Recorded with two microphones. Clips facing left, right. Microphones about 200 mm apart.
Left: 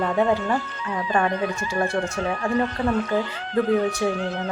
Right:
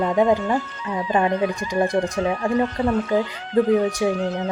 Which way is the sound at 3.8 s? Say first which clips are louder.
Right 2 dB; 20° right (ahead or behind).